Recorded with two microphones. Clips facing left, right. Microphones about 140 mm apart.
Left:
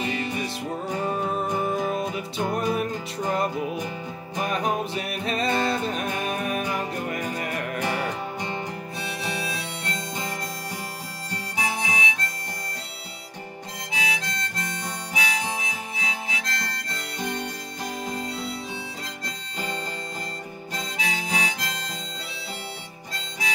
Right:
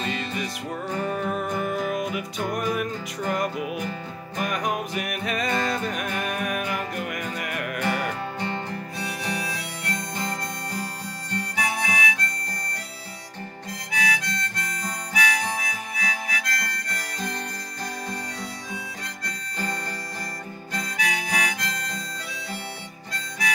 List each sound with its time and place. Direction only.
0.0 s music: 15° left (ahead or behind)
1.0 s music: 30° left (ahead or behind)
7.8 s harmonica: 15° left (ahead or behind)
11.5 s harmonica: 25° left (ahead or behind)
13.9 s harmonica: 25° left (ahead or behind)
20.7 s harmonica: 25° left (ahead or behind)